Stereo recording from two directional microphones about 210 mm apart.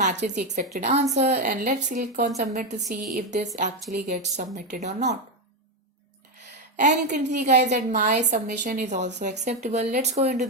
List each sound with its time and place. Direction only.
0.0 s speech: 35° right (ahead or behind)
3.9 s speech: 45° right (ahead or behind)
6.7 s speech: 35° right (ahead or behind)
7.9 s speech: 45° right (ahead or behind)